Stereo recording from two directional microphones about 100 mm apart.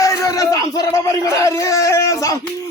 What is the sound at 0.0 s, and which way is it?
A man's voice, 35° left (ahead or behind).